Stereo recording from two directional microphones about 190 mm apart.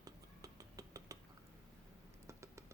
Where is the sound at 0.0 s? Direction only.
20° right (ahead or behind).